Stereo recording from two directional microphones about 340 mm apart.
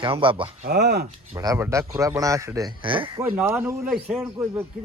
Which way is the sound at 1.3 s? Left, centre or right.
Centre.